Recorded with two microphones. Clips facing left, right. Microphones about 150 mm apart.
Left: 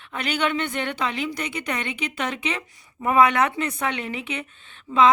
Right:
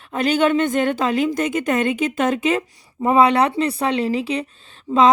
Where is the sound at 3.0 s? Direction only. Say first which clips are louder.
Right 4 dB; 30° right (ahead or behind).